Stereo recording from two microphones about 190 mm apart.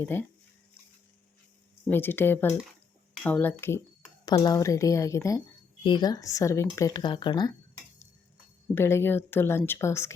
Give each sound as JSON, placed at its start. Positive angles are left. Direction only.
{"t": 0.0, "sound": "speech", "side_deg": 10}
{"t": 1.9, "sound": "speech", "side_deg": 10}
{"t": 8.7, "sound": "speech", "side_deg": 15}